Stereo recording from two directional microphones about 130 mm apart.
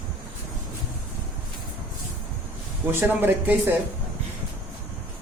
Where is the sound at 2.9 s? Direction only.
15° right (ahead or behind).